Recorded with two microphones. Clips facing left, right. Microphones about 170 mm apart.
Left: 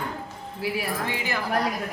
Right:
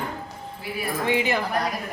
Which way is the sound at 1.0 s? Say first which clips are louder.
Right 6 dB; 20° right (ahead or behind).